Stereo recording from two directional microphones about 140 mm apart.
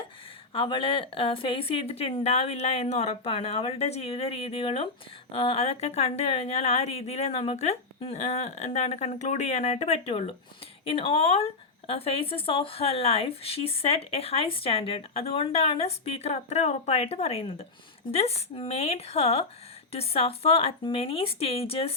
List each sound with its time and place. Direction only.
0.5 s speech: 40° left (ahead or behind)